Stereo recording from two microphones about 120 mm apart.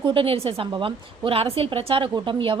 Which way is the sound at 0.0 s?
45° right (ahead or behind).